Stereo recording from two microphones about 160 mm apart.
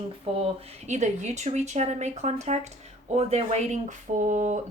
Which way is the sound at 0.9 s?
45° right (ahead or behind).